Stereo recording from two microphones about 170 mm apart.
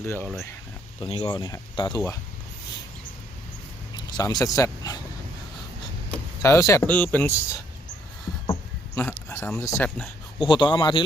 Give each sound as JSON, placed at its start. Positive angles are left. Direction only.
{"t": 0.0, "sound": "speech", "side_deg": 15}
{"t": 0.9, "sound": "speech", "side_deg": 30}
{"t": 3.9, "sound": "speech", "side_deg": 25}
{"t": 6.4, "sound": "speech", "side_deg": 15}
{"t": 9.0, "sound": "speech", "side_deg": 10}
{"t": 10.0, "sound": "a sound", "side_deg": -5}
{"t": 10.5, "sound": "speech", "side_deg": 30}